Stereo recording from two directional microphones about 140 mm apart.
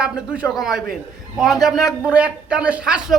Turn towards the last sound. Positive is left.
turn(degrees=-5)  # may be behind; listen again after turning